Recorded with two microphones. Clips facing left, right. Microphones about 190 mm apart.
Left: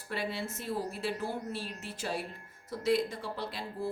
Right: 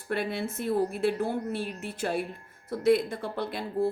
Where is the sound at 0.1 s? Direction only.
55° right (ahead or behind).